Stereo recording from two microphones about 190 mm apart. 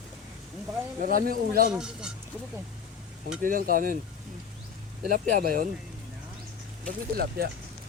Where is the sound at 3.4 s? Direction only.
45° right (ahead or behind).